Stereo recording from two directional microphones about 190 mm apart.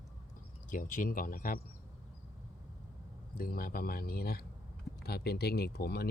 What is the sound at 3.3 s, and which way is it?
Speech, 50° left (ahead or behind).